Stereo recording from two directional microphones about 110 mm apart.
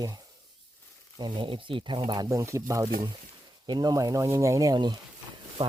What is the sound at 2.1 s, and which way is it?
Speech, 35° right (ahead or behind).